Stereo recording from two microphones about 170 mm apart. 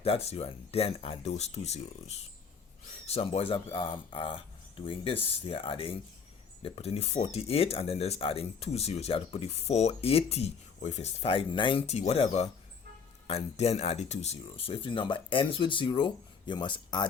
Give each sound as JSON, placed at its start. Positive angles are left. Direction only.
{"t": 0.0, "sound": "speech", "side_deg": 35}